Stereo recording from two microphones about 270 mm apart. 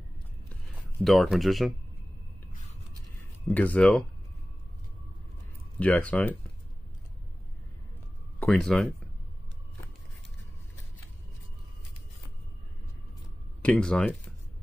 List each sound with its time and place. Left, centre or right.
1.0 s speech: centre
3.4 s speech: centre
5.8 s speech: centre
8.4 s speech: centre
13.6 s speech: centre